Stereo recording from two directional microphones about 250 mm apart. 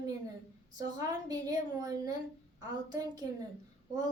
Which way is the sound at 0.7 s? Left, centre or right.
Centre.